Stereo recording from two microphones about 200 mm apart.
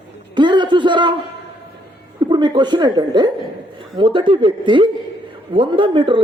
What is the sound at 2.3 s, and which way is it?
Speech, 20° right (ahead or behind).